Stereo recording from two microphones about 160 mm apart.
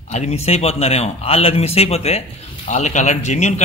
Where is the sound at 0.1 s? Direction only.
45° left (ahead or behind).